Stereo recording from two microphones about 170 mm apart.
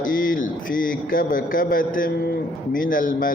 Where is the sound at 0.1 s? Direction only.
55° left (ahead or behind).